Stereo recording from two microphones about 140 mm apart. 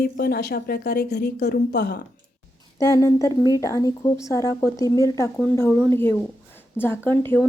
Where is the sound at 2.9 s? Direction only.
25° left (ahead or behind).